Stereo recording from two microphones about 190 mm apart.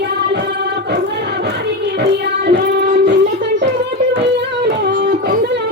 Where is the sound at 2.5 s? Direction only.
65° right (ahead or behind).